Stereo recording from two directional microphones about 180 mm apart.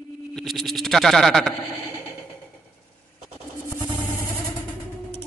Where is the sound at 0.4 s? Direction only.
Centre (ahead or behind).